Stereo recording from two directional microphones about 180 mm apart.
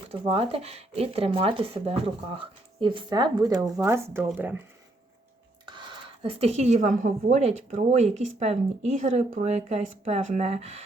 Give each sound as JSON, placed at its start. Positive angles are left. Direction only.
{"t": 0.1, "sound": "speech", "side_deg": -30}
{"t": 5.6, "sound": "speech", "side_deg": -25}